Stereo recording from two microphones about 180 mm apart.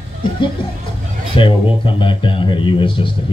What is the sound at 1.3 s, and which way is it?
Speech, 30° left (ahead or behind).